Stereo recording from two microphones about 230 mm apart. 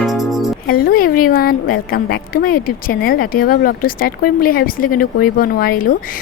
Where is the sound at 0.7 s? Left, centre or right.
Left.